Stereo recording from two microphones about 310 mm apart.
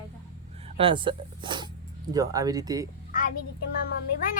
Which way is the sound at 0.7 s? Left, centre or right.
Centre.